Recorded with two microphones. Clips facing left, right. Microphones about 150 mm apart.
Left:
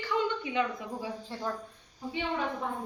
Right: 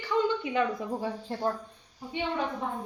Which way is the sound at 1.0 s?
40° right (ahead or behind).